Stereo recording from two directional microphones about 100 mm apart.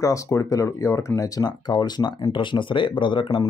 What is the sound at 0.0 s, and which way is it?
Speech, 35° left (ahead or behind).